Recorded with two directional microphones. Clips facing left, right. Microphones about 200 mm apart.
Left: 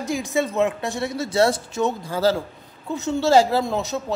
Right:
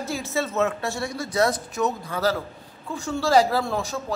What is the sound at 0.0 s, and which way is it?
A man's voice, 15° left (ahead or behind).